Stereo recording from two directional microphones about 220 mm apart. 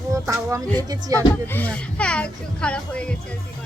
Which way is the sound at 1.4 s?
10° left (ahead or behind).